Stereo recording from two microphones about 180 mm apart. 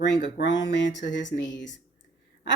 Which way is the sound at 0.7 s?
85° left.